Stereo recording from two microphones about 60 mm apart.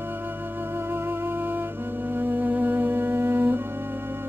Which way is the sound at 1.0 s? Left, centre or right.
Right.